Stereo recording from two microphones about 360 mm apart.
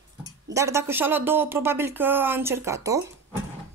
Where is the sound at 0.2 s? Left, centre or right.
Centre.